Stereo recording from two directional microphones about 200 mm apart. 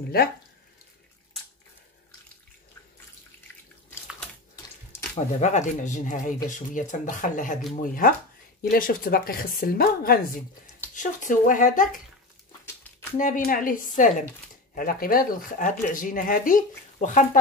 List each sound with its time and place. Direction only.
5.1 s speech: 35° left (ahead or behind)
13.2 s speech: 40° left (ahead or behind)